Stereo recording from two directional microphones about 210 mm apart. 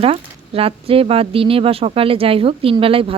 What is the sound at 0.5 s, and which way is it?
Speech, 25° right (ahead or behind).